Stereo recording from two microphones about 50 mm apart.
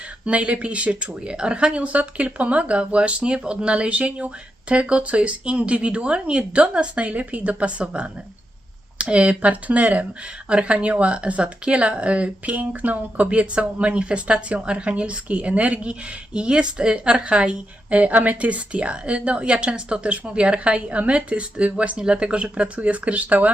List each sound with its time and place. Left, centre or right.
0.3 s speech: right